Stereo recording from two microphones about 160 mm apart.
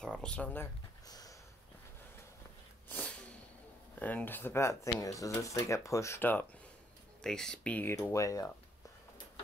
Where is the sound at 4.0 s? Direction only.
10° left (ahead or behind).